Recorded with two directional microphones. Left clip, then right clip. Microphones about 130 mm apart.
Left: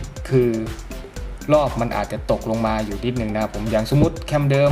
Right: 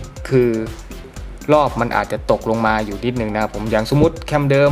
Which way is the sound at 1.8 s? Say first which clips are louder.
Right 5 dB; 20° right (ahead or behind).